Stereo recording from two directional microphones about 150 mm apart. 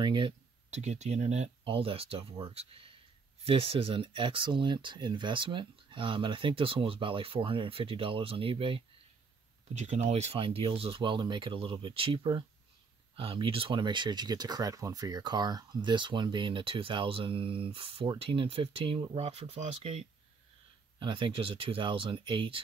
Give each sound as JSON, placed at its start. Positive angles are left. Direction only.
{"t": 0.0, "sound": "speech", "side_deg": -30}
{"t": 0.7, "sound": "speech", "side_deg": -50}
{"t": 1.6, "sound": "speech", "side_deg": -40}
{"t": 9.8, "sound": "speech", "side_deg": -50}